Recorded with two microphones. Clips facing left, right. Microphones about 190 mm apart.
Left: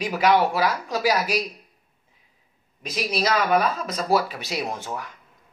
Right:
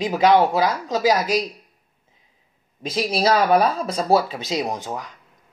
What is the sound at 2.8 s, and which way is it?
A man's voice, 30° right (ahead or behind).